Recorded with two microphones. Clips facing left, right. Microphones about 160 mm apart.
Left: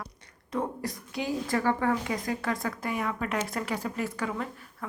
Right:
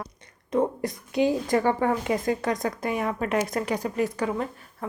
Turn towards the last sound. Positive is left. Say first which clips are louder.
# right 5 dB
turn(degrees=-25)  # may be behind; listen again after turning